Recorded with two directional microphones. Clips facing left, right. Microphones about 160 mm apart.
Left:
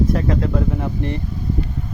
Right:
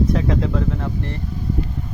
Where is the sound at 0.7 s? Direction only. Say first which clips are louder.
Left 3 dB; 15° left (ahead or behind).